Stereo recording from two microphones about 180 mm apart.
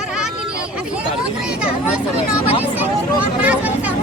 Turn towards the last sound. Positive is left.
turn(degrees=-10)  # may be behind; listen again after turning